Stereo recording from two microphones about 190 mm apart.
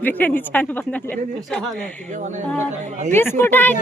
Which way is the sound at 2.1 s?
40° right (ahead or behind).